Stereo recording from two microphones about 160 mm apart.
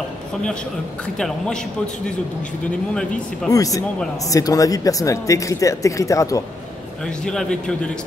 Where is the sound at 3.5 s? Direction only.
20° left (ahead or behind).